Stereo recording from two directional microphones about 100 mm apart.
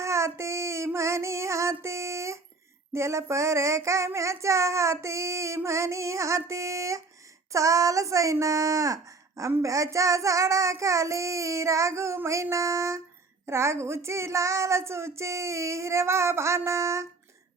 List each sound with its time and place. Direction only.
0.0 s female singing: 30° right (ahead or behind)
2.9 s child singing: 30° right (ahead or behind)
7.5 s speech: 35° right (ahead or behind)
13.5 s child singing: 30° right (ahead or behind)